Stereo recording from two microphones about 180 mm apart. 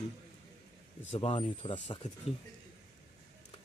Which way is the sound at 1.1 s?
30° left (ahead or behind).